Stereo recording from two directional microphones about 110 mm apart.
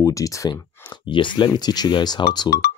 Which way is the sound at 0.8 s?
50° left (ahead or behind).